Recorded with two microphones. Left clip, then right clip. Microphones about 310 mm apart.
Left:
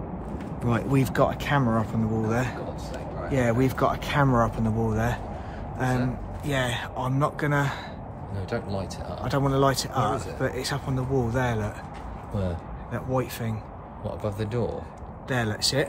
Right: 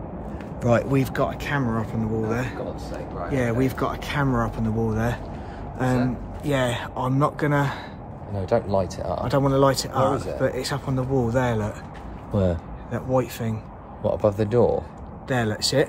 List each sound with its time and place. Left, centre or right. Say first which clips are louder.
0.7 s speech: right 5 dB; centre
8.4 s speech: right 10 dB; right
9.2 s speech: right 3 dB; centre
12.9 s speech: right 5 dB; centre
14.0 s speech: right 10 dB; right
15.2 s speech: right 2 dB; centre